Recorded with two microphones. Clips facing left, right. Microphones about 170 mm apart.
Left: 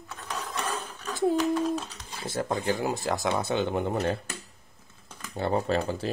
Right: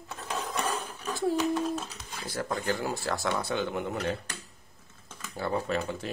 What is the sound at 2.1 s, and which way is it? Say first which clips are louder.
Speech: left 3 dB; 25° left (ahead or behind).